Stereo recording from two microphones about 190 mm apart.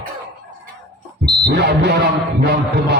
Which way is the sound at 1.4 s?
60° right (ahead or behind).